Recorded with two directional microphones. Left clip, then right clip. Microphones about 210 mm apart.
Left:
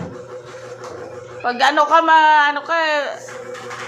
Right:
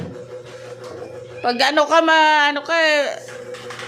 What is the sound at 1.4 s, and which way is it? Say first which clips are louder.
A man's voice: left 1 dB; 45° right (ahead or behind).